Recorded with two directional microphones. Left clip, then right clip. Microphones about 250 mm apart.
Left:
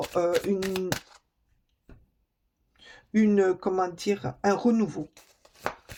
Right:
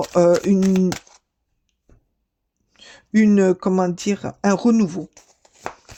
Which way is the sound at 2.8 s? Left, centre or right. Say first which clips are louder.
Right 7 dB; right.